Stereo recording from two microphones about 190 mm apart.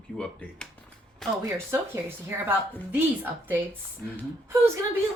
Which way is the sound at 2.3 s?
10° right (ahead or behind).